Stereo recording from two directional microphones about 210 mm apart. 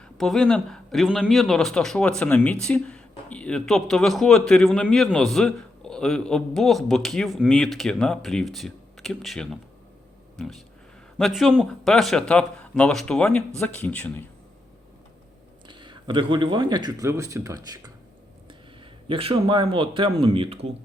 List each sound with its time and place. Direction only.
0.2 s speech: centre (ahead or behind)
15.6 s speech: 20° right (ahead or behind)
19.0 s speech: 25° right (ahead or behind)